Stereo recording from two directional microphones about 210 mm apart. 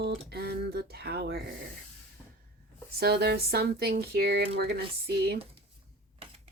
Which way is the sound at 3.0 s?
50° right (ahead or behind).